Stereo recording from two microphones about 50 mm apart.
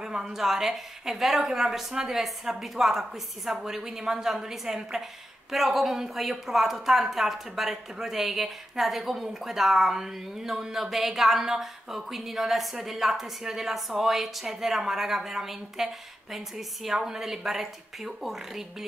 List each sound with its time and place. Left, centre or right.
0.2 s a woman's voice: centre